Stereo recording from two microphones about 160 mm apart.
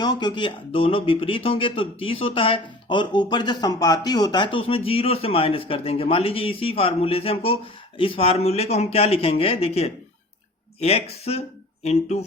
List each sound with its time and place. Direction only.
0.0 s speech: 25° left (ahead or behind); by 12.2 s 45° left (ahead or behind)